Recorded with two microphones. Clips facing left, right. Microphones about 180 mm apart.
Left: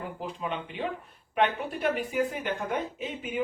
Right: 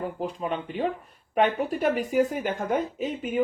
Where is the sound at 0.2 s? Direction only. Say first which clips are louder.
Right 4 dB; 40° right (ahead or behind).